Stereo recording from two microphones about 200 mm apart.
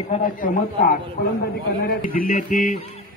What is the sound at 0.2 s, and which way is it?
Speech, 45° left (ahead or behind).